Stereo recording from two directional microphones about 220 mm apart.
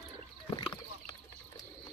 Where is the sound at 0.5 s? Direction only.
20° left (ahead or behind).